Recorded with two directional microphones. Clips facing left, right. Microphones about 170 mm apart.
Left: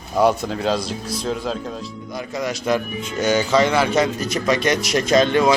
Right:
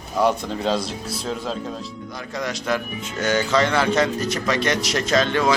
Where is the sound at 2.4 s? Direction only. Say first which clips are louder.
Left 3 dB; 10° left (ahead or behind).